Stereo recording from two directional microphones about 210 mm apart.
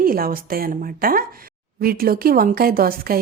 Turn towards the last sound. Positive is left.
turn(degrees=-45)  # may be behind; listen again after turning